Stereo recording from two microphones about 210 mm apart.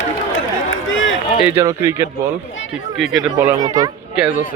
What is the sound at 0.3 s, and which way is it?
Run, 70° left (ahead or behind).